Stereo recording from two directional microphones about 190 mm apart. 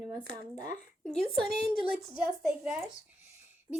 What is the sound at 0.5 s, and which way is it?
Speech, 40° left (ahead or behind).